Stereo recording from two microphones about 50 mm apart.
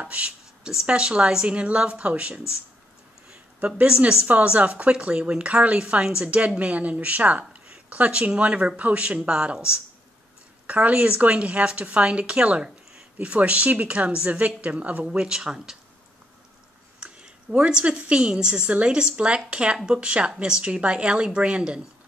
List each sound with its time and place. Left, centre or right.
0.0 s a sound: right
0.8 s a woman's voice: right
3.7 s a woman's voice: right
4.3 s a woman's voice: right
10.7 s a woman's voice: right
15.0 s speech: centre
17.0 s a woman's voice: centre